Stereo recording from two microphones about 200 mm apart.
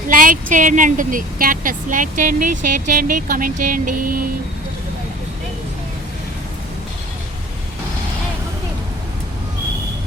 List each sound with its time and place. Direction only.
0.1 s a woman's voice: 40° right (ahead or behind)